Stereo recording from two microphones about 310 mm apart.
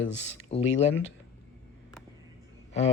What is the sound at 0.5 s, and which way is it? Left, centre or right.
Speech, centre.